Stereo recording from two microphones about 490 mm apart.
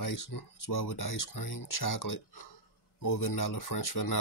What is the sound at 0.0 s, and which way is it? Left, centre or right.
Speech, left.